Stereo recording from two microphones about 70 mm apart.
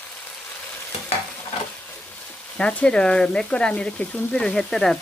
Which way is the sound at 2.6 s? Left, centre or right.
Centre.